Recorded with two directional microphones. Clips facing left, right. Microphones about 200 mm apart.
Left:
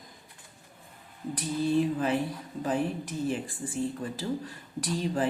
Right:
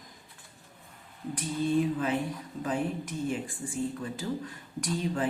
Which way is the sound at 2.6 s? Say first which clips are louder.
Left 2 dB; 35° left (ahead or behind).